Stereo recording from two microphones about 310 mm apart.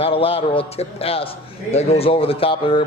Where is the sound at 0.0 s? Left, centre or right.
Centre.